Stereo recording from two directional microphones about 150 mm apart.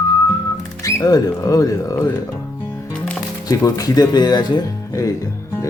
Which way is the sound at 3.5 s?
25° left (ahead or behind).